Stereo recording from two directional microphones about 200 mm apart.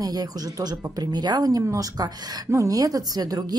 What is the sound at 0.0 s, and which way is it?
Speech, 20° right (ahead or behind).